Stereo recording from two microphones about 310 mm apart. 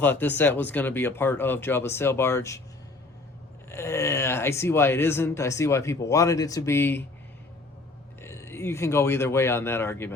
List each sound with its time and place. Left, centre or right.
0.0 s speech: centre
3.7 s speech: centre
8.2 s speech: centre